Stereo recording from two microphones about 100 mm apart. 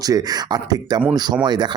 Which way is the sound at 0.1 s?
40° right (ahead or behind).